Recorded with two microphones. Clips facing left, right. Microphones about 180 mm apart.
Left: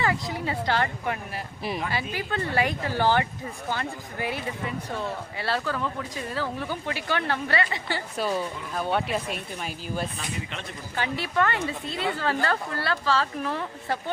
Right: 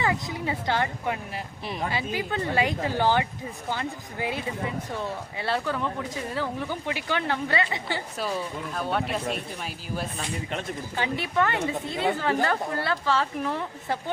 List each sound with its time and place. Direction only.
0.0 s a woman's voice: 20° right (ahead or behind)
8.1 s speech: centre (ahead or behind)
10.9 s a woman's voice: 20° right (ahead or behind)